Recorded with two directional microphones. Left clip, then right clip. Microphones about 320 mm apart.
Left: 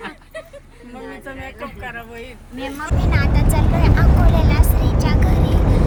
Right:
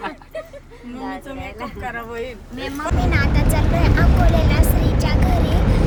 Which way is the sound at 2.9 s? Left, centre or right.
Centre.